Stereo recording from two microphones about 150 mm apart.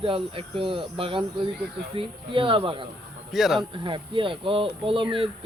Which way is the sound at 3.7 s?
35° right (ahead or behind).